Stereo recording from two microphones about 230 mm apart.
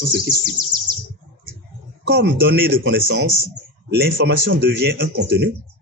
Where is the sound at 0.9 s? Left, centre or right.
Centre.